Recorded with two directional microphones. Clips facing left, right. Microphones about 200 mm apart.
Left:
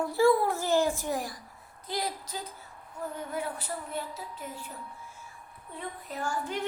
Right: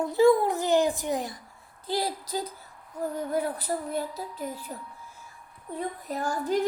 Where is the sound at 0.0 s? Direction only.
20° right (ahead or behind).